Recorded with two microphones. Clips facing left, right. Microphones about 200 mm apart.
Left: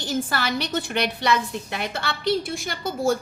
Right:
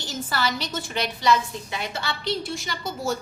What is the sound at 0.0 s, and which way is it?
A woman's voice, 55° left (ahead or behind).